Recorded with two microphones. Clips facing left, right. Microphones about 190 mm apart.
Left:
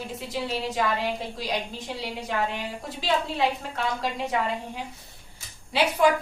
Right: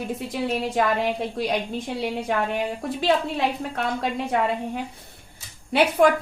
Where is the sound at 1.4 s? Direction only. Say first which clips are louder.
Right 7 dB; 55° right (ahead or behind).